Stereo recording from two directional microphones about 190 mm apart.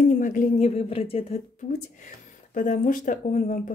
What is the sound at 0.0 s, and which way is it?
Speech, 45° left (ahead or behind).